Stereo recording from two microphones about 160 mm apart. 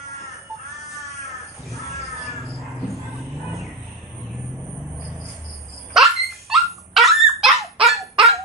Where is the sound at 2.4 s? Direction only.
Centre (ahead or behind).